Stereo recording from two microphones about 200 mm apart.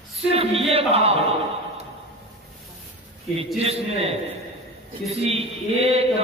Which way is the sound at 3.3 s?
30° right (ahead or behind).